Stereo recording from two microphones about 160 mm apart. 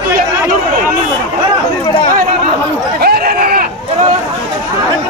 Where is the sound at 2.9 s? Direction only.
75° right (ahead or behind).